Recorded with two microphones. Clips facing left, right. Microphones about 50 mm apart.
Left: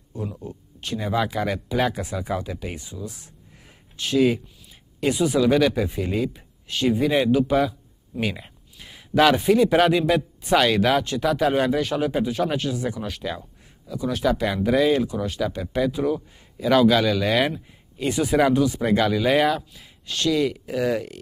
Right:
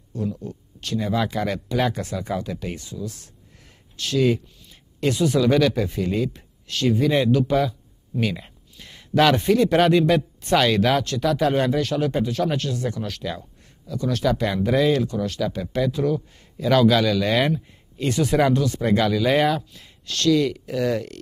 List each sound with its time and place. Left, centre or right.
0.1 s speech: centre